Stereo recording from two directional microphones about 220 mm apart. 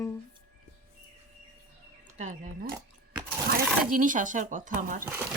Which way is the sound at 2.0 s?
35° right (ahead or behind).